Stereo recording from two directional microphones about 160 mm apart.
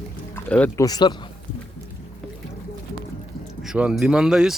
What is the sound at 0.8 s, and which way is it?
Speech, 25° left (ahead or behind).